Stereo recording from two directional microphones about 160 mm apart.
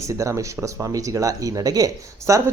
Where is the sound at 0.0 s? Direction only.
20° right (ahead or behind).